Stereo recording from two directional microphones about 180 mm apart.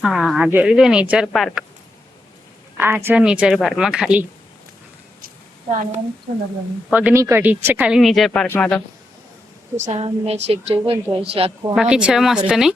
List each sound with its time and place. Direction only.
0.0 s speech: centre (ahead or behind)
2.7 s speech: 10° right (ahead or behind)
5.7 s a woman's voice: 45° right (ahead or behind)
6.9 s speech: 10° right (ahead or behind); by 8.8 s 10° left (ahead or behind)
9.8 s a woman's voice: 35° right (ahead or behind)
11.7 s speech: 5° right (ahead or behind)